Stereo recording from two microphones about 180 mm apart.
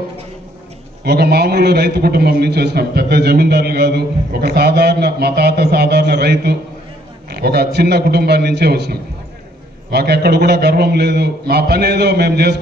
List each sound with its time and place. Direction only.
1.0 s a man's voice: 65° right (ahead or behind)